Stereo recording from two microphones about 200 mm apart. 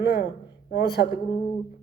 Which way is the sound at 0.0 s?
50° left (ahead or behind).